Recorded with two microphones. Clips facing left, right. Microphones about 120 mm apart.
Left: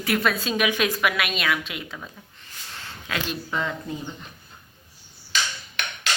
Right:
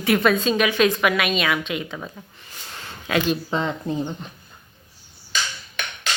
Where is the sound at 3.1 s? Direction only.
25° right (ahead or behind).